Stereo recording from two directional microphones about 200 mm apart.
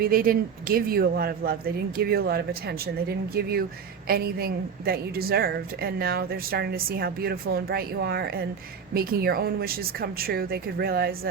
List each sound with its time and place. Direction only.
0.0 s a woman's voice: 45° right (ahead or behind)